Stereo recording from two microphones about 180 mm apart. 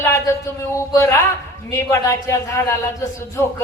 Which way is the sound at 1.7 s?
15° left (ahead or behind).